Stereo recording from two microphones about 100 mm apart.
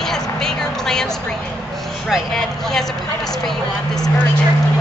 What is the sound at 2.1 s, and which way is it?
Speech, 5° left (ahead or behind).